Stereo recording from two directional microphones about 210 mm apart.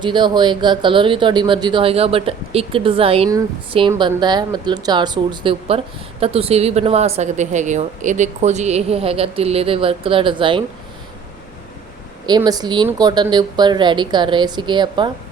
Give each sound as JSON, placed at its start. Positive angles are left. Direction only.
{"t": 0.0, "sound": "speech", "side_deg": -20}
{"t": 12.2, "sound": "speech", "side_deg": -20}